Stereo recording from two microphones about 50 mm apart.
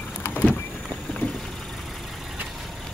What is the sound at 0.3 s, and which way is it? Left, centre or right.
Vehicle, left.